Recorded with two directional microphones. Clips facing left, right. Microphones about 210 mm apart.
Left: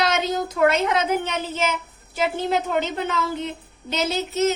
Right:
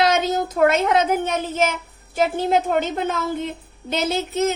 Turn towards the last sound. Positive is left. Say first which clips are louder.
# right 2 dB
turn(degrees=-50)  # may be behind; listen again after turning